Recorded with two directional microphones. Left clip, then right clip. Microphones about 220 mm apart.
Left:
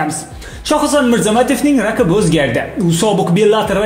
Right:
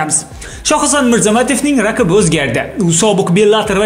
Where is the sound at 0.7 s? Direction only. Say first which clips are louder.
Right 1 dB; 25° right (ahead or behind).